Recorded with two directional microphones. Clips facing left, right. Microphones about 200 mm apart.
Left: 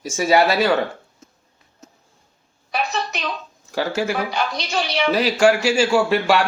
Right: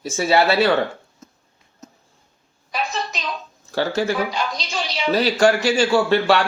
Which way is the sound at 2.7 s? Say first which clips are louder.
Left 2 dB; 65° left (ahead or behind).